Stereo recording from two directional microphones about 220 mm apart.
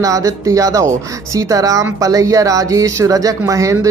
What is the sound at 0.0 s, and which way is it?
Speech, 15° right (ahead or behind).